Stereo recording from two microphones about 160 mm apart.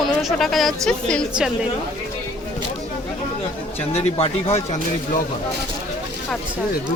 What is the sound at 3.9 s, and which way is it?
Speech, 40° left (ahead or behind).